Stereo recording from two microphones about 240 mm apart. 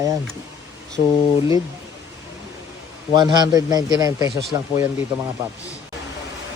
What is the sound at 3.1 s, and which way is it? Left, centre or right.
Speech, centre.